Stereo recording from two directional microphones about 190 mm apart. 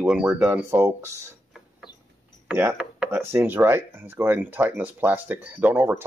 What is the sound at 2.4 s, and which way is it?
Speech, 10° right (ahead or behind).